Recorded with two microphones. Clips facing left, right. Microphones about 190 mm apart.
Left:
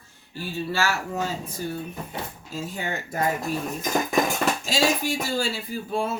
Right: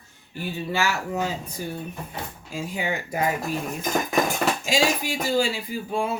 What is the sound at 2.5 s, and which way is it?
Speech, 10° right (ahead or behind).